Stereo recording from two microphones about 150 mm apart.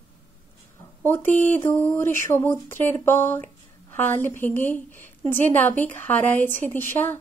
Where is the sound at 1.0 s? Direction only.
15° left (ahead or behind).